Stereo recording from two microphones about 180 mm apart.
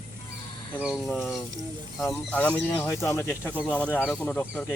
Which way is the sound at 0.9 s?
5° left (ahead or behind).